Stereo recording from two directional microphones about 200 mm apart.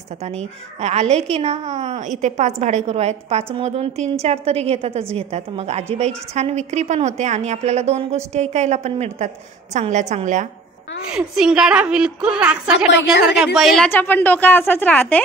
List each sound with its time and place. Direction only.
0.7 s a woman's voice: 35° right (ahead or behind)
11.1 s a woman's voice: 5° right (ahead or behind)